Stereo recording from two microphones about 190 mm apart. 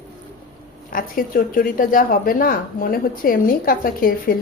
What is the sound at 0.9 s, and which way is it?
A woman's voice, 45° left (ahead or behind).